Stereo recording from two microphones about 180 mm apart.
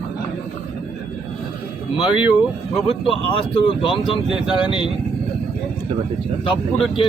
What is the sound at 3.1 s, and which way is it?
Speech, 30° left (ahead or behind).